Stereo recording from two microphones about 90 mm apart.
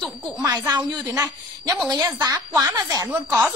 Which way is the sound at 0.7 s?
50° right (ahead or behind).